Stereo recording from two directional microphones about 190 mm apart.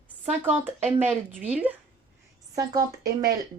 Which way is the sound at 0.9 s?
10° right (ahead or behind).